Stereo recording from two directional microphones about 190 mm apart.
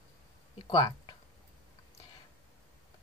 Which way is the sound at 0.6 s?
20° left (ahead or behind).